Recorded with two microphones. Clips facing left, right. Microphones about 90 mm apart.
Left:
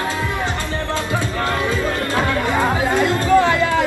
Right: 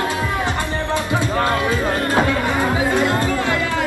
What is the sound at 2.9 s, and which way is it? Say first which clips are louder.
Music: even; 20° right (ahead or behind).